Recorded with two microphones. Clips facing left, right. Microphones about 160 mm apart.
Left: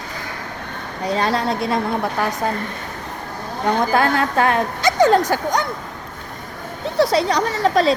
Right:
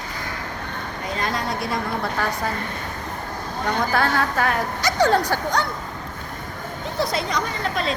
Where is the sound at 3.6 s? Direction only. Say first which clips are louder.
Left 5 dB; 20° left (ahead or behind).